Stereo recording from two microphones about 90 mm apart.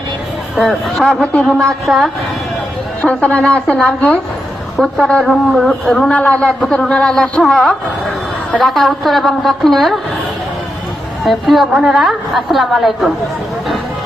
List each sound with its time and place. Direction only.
0.6 s a woman's voice: centre (ahead or behind)
3.0 s a woman's voice: 15° left (ahead or behind)
6.1 s a woman's voice: 20° left (ahead or behind)
6.6 s a woman's voice: 5° left (ahead or behind)
11.2 s a woman's voice: centre (ahead or behind)